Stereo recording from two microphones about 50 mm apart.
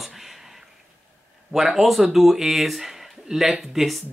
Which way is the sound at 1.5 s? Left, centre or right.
Centre.